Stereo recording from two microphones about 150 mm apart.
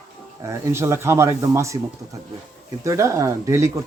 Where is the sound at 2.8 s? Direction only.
20° right (ahead or behind).